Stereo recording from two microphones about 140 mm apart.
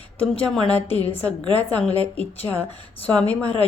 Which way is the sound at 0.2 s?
5° left (ahead or behind).